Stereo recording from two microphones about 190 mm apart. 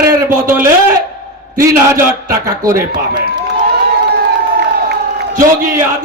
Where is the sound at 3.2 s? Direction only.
50° right (ahead or behind).